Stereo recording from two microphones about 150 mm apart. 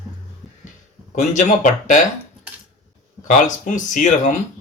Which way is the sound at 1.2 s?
55° left (ahead or behind).